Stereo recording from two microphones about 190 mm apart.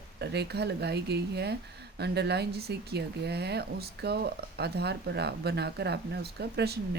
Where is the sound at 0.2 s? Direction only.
60° right (ahead or behind).